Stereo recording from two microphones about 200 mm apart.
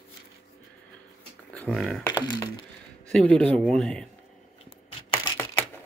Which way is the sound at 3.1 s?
5° left (ahead or behind).